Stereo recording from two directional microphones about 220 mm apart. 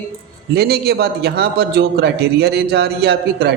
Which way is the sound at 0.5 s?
45° right (ahead or behind).